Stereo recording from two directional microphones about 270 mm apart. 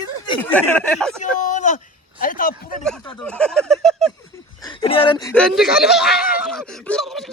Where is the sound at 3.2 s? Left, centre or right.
Centre.